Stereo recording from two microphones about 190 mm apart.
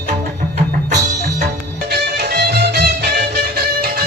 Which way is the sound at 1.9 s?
55° right (ahead or behind).